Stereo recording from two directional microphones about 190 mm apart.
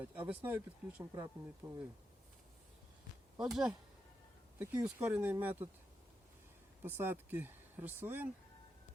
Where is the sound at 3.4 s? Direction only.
Centre (ahead or behind).